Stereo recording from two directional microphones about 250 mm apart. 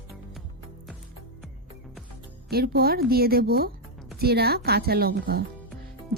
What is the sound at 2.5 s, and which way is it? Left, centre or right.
A woman's voice, right.